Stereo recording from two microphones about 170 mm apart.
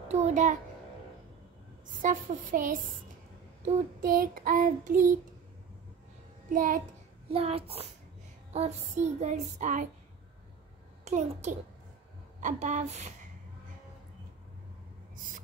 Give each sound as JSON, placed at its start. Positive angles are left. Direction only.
{"t": 0.1, "sound": "a child's voice", "side_deg": -45}
{"t": 2.0, "sound": "child singing", "side_deg": -50}
{"t": 6.5, "sound": "child singing", "side_deg": -50}
{"t": 7.2, "sound": "a child's voice", "side_deg": -35}
{"t": 8.5, "sound": "child singing", "side_deg": -40}
{"t": 11.1, "sound": "a child's voice", "side_deg": -40}
{"t": 12.4, "sound": "child singing", "side_deg": -45}